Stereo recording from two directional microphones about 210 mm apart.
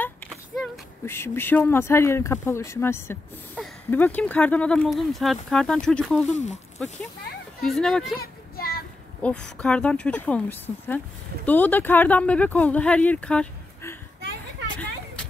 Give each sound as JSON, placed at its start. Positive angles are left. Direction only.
{"t": 1.0, "sound": "speech", "side_deg": 10}
{"t": 8.2, "sound": "a sound", "side_deg": 45}
{"t": 9.2, "sound": "speech", "side_deg": 5}